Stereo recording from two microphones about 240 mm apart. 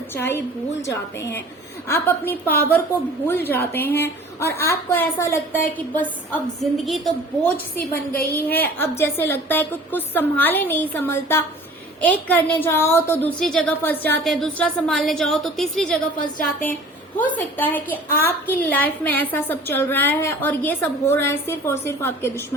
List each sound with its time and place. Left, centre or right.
0.2 s a woman's voice: centre
7.9 s a woman's voice: left
8.4 s a woman's voice: centre
17.3 s a woman's voice: centre